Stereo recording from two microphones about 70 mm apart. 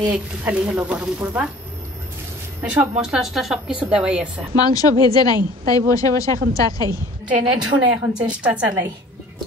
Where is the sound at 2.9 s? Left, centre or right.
Centre.